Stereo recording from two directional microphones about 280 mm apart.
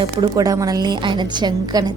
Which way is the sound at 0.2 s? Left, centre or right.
Centre.